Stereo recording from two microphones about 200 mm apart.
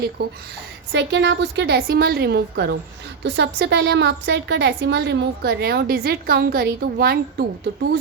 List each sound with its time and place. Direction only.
0.2 s a woman's voice: 50° right (ahead or behind)
0.9 s a woman's voice: 65° right (ahead or behind)